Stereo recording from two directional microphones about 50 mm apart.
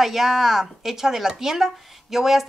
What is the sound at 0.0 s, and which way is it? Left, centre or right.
A woman's voice, centre.